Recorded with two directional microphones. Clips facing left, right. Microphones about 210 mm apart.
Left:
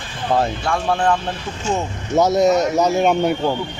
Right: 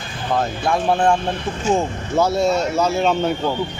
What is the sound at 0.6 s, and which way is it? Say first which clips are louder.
Speech: right 2 dB; 20° right (ahead or behind).